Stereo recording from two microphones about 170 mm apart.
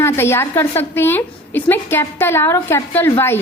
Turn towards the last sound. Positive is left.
turn(degrees=15)  # may be behind; listen again after turning